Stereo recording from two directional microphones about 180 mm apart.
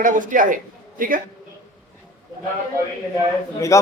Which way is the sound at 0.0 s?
45° right (ahead or behind).